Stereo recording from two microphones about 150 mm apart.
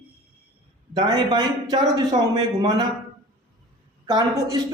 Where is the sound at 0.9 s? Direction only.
30° right (ahead or behind).